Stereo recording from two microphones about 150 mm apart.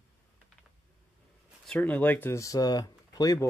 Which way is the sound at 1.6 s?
5° left (ahead or behind).